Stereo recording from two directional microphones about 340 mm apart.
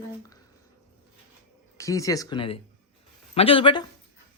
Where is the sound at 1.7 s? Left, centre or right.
Centre.